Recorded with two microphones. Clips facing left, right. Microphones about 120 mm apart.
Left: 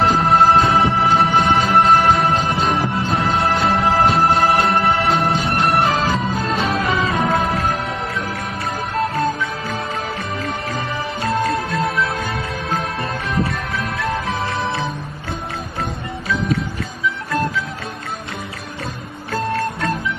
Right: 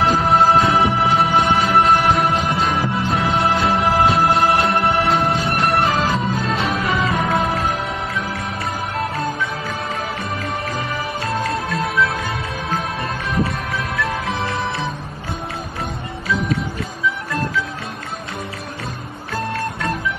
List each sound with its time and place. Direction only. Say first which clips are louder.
0.2 s music: left 1 dB; centre (ahead or behind)
2.3 s music: left 1 dB; 30° left (ahead or behind)
2.9 s music: even; centre (ahead or behind)
11.4 s music: left 2 dB; 30° left (ahead or behind)
19.3 s music: left 3 dB; centre (ahead or behind)